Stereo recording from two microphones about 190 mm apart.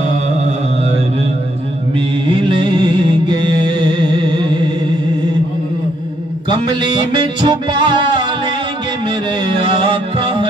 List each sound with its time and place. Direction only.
2.0 s music: 25° right (ahead or behind)
6.5 s music: 25° right (ahead or behind)
9.5 s music: 25° right (ahead or behind)